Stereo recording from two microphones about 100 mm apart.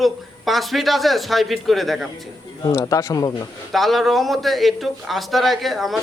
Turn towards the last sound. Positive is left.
turn(degrees=0)  # may be behind; listen again after turning